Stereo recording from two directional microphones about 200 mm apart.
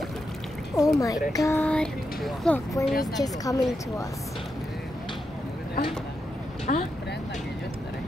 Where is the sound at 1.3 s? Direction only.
15° left (ahead or behind).